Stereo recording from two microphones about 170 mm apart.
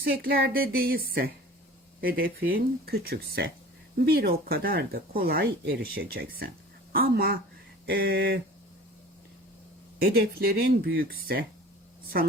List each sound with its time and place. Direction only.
0.0 s speech: 65° right (ahead or behind)
10.0 s speech: 60° right (ahead or behind)